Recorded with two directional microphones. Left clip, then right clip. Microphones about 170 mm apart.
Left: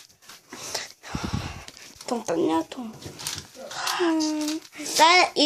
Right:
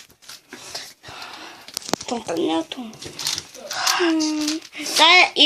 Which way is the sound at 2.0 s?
10° left (ahead or behind).